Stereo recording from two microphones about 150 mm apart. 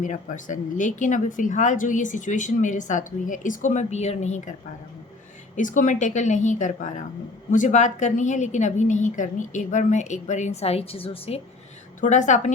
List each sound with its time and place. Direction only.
0.0 s speech: 60° left (ahead or behind)
5.5 s a woman's voice: 60° left (ahead or behind); by 11.3 s 40° left (ahead or behind)
11.9 s a woman's voice: 55° left (ahead or behind)